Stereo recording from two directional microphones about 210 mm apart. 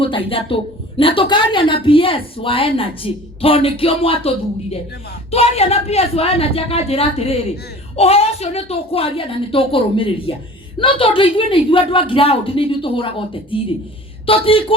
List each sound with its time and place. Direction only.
0.3 s a woman's voice: 25° left (ahead or behind)